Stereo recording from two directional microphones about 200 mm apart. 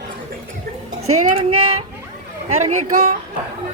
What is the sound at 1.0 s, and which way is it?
Speech, 90° right.